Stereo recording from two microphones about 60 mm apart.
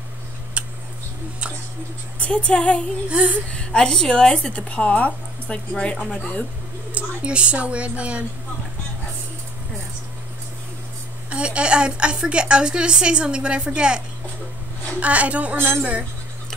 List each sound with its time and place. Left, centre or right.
0.6 s tick-tock: right
2.1 s speech: left
3.1 s a woman's voice: right
3.5 s speech: centre
6.9 s speech: centre
11.2 s a woman's voice: centre
15.5 s speech: right